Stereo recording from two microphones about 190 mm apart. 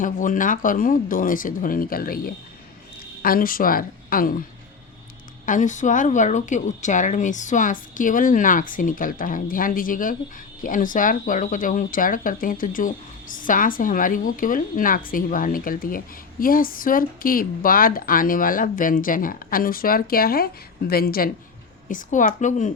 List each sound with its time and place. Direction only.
0.0 s speech: 45° left (ahead or behind)
5.5 s a woman's voice: 40° left (ahead or behind)